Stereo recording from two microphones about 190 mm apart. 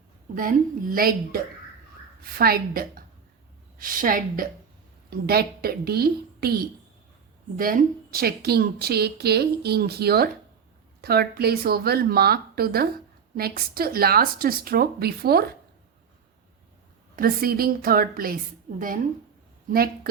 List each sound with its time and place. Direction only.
0.3 s a woman's voice: 45° right (ahead or behind)
17.2 s speech: 50° right (ahead or behind)